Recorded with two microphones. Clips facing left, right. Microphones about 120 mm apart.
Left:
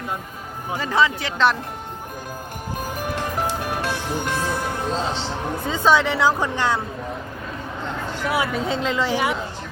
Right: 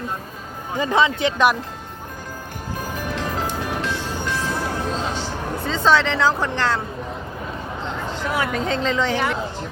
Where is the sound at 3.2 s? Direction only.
15° left (ahead or behind).